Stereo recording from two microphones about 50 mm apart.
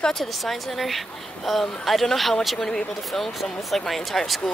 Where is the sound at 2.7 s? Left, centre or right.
Left.